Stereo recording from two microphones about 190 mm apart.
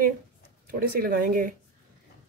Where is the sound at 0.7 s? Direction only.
50° right (ahead or behind).